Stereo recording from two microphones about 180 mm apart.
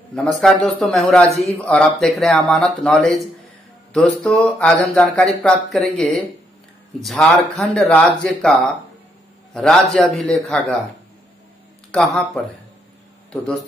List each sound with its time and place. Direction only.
0.4 s speech: centre (ahead or behind)
11.9 s speech: 5° left (ahead or behind)